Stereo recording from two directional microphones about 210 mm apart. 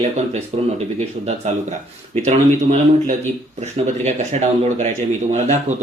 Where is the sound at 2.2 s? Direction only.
35° right (ahead or behind).